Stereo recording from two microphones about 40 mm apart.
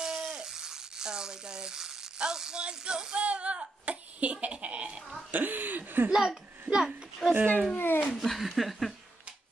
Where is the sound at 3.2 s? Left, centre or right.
Right.